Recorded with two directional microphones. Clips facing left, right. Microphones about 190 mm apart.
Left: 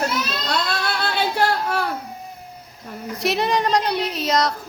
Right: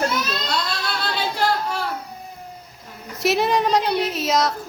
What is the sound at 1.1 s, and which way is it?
Singing, 55° left (ahead or behind).